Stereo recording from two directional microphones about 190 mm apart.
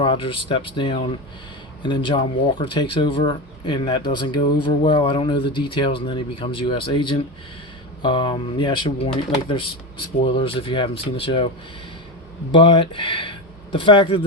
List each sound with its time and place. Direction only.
0.0 s speech: 30° left (ahead or behind)
10.3 s speech: 30° left (ahead or behind)
12.5 s speech: 25° left (ahead or behind)